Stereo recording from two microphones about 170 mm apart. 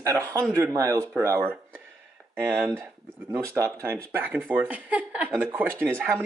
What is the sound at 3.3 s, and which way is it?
Speech, 15° right (ahead or behind).